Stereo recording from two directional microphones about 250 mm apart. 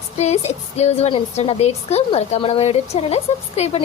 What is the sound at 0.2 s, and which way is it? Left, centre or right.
A woman's voice, left.